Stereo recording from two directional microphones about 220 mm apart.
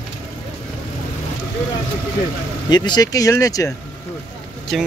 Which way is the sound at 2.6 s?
20° left (ahead or behind).